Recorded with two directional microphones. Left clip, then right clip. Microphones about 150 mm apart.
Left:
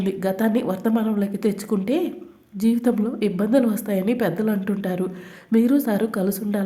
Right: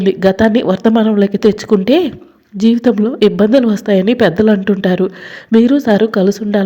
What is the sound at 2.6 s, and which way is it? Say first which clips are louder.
A woman's voice: right 10 dB; 30° right (ahead or behind).